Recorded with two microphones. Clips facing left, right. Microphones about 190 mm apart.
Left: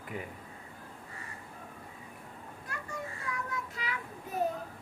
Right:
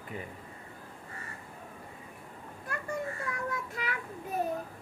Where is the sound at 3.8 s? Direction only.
55° right (ahead or behind).